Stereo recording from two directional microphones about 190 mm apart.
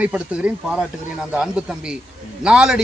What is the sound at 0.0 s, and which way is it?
Speech, 5° right (ahead or behind).